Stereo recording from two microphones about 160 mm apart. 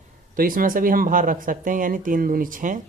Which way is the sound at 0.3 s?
60° right (ahead or behind).